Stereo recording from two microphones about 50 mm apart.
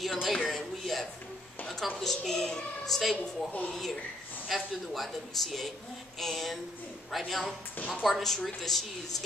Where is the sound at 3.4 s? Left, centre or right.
Left.